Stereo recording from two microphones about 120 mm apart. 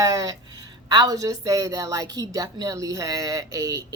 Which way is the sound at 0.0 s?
30° right (ahead or behind).